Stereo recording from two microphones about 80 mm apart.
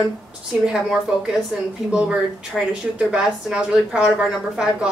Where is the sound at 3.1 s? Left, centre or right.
Centre.